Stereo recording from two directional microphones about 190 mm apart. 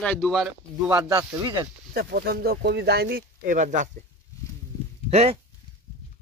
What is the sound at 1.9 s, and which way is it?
Speech, 55° right (ahead or behind).